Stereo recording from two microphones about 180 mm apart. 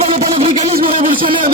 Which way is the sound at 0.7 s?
55° right (ahead or behind).